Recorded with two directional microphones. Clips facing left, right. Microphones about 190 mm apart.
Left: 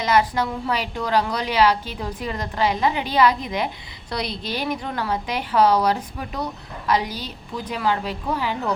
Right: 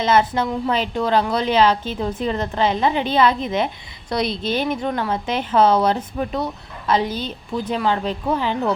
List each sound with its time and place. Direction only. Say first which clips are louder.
0.0 s a woman's voice: right 2 dB; 25° right (ahead or behind)